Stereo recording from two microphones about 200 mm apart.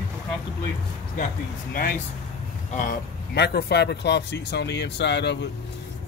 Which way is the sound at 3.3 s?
55° left (ahead or behind).